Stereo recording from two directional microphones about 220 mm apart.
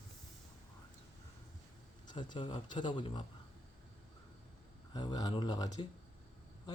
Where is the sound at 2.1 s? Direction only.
20° left (ahead or behind).